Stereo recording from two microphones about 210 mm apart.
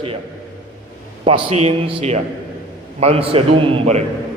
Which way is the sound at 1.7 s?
25° right (ahead or behind).